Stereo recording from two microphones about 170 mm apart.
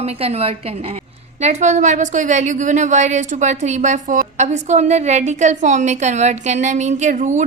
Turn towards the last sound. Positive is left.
turn(degrees=-45)  # may be behind; listen again after turning